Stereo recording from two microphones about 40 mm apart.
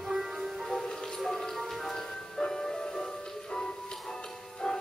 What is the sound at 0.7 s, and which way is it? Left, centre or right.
Music, centre.